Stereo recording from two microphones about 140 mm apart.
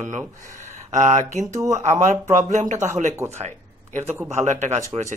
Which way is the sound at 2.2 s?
60° right (ahead or behind).